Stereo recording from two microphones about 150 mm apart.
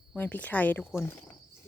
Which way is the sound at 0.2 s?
10° left (ahead or behind).